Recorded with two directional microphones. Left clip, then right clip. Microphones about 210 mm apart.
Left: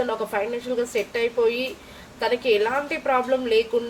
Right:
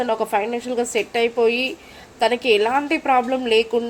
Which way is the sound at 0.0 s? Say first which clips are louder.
Right 4 dB; 40° right (ahead or behind).